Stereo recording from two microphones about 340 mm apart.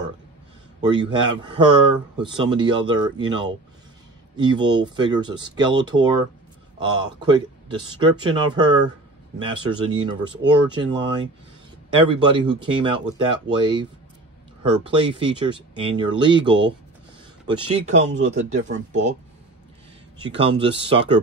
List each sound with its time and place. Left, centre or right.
0.7 s speech: centre
17.8 s speech: centre
20.2 s speech: centre